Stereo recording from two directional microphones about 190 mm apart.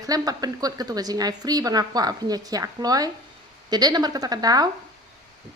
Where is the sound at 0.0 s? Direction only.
20° right (ahead or behind).